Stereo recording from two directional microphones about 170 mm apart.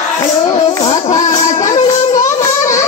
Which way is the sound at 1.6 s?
45° left (ahead or behind).